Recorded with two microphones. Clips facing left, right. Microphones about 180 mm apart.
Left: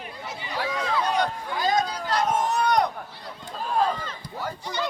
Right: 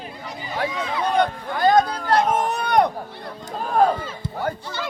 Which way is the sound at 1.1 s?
55° right (ahead or behind).